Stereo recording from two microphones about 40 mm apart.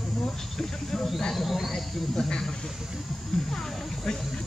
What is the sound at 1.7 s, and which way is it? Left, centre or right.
Speech, centre.